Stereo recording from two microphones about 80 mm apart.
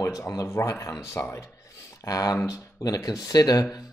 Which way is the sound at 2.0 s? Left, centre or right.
Left.